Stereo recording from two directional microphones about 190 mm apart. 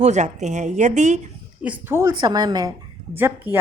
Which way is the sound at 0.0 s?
40° right (ahead or behind).